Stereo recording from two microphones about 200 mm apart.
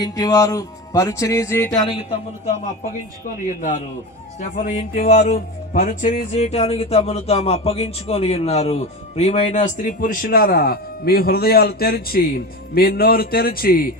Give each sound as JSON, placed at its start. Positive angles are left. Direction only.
{"t": 0.0, "sound": "music", "side_deg": 20}
{"t": 4.4, "sound": "a man's voice", "side_deg": 40}